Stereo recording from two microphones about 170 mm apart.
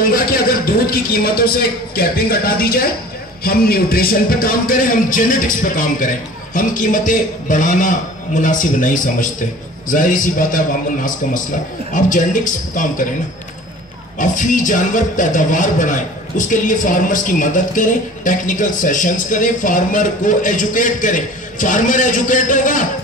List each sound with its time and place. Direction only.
0.0 s a man's voice: 60° left (ahead or behind)
11.9 s speech: 50° left (ahead or behind)
14.1 s speech: 50° left (ahead or behind)